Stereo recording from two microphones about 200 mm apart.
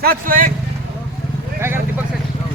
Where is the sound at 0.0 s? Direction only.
45° right (ahead or behind).